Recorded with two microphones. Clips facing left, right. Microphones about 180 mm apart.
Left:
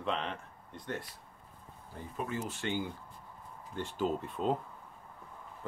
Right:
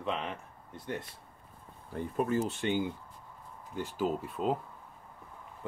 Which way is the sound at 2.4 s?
20° right (ahead or behind).